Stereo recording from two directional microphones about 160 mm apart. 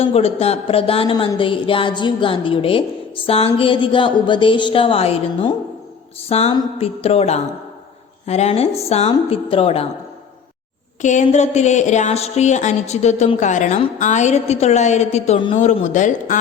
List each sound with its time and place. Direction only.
0.0 s a woman's voice: 40° left (ahead or behind)
11.0 s a woman's voice: 50° left (ahead or behind)